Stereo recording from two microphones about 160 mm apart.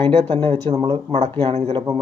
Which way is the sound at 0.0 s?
30° right (ahead or behind).